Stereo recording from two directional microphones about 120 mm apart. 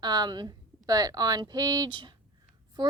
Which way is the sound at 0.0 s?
35° right (ahead or behind).